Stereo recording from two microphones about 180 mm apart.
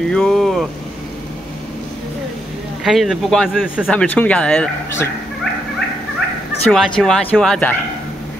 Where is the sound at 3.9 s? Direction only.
10° left (ahead or behind).